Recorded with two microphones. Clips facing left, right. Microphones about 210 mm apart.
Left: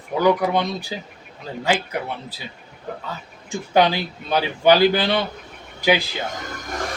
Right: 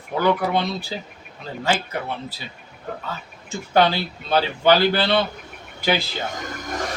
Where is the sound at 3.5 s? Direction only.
15° left (ahead or behind).